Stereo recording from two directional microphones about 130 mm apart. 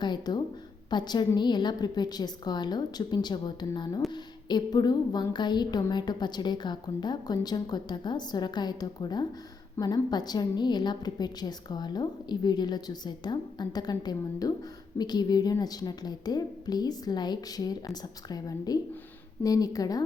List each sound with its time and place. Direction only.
0.0 s a woman's voice: 35° left (ahead or behind)